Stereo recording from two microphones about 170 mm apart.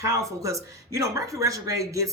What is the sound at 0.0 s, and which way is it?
Speech, 20° right (ahead or behind).